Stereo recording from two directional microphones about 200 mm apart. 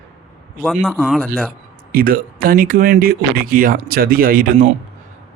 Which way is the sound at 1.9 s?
45° right (ahead or behind).